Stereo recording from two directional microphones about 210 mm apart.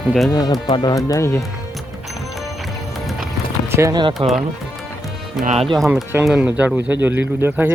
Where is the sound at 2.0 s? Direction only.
Centre (ahead or behind).